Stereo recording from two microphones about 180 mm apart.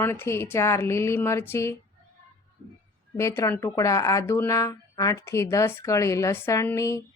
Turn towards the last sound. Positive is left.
turn(degrees=15)  # may be behind; listen again after turning